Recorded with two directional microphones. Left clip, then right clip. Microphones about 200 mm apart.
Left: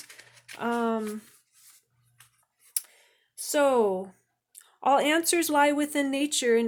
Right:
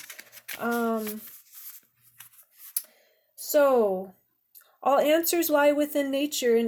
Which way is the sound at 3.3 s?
15° left (ahead or behind).